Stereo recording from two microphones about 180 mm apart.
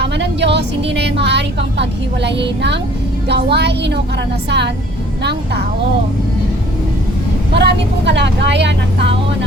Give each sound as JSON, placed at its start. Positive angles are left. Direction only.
{"t": 0.0, "sound": "a woman's voice", "side_deg": -75}
{"t": 7.5, "sound": "a woman's voice", "side_deg": -70}